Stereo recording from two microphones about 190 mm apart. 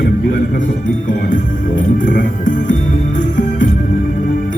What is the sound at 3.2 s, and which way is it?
Music, 40° left (ahead or behind).